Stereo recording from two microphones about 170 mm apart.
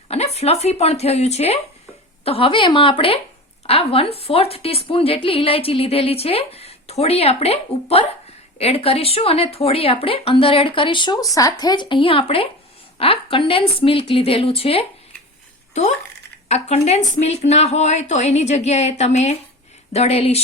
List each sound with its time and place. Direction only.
0.1 s a woman's voice: 35° left (ahead or behind)
16.5 s a woman's voice: 40° left (ahead or behind)